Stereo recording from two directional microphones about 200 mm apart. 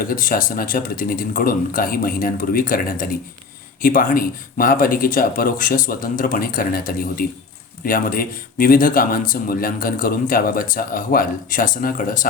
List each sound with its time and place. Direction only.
0.0 s speech: 45° left (ahead or behind)